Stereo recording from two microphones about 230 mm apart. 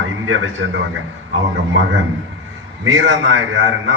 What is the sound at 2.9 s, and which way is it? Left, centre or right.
Speech, right.